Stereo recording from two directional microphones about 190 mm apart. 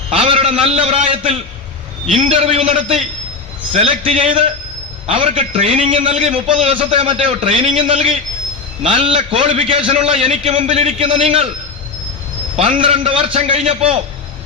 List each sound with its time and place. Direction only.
0.1 s a man's voice: 30° right (ahead or behind)
12.5 s a man's voice: 30° right (ahead or behind)